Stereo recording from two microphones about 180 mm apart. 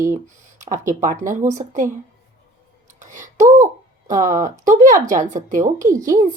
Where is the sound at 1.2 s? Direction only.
45° right (ahead or behind).